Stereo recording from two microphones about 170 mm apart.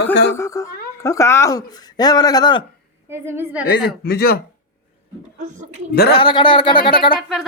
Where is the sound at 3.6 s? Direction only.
70° left (ahead or behind).